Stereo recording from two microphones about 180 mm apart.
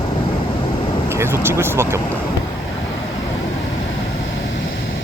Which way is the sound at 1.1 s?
15° right (ahead or behind).